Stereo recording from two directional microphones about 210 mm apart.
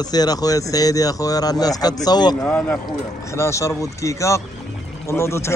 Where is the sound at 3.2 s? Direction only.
15° left (ahead or behind).